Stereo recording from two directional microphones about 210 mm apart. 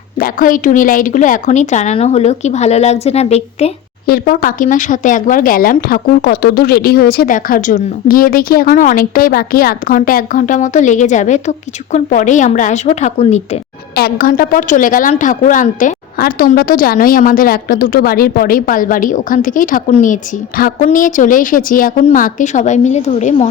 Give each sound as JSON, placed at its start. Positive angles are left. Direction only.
{"t": 0.2, "sound": "speech", "side_deg": 40}
{"t": 4.0, "sound": "speech", "side_deg": 45}
{"t": 13.9, "sound": "speech", "side_deg": 45}